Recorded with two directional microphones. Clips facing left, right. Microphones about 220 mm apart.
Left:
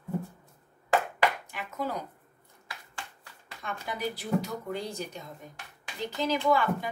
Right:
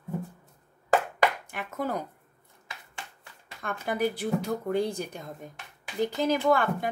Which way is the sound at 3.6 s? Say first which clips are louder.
Right 6 dB; 55° right (ahead or behind).